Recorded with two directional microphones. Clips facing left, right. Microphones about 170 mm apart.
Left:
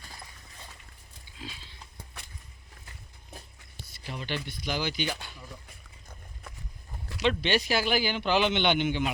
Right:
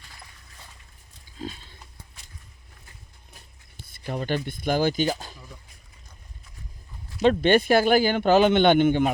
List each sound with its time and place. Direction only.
1.4 s a sound: 50° right (ahead or behind)
3.8 s speech: 50° right (ahead or behind)
7.3 s speech: 50° right (ahead or behind)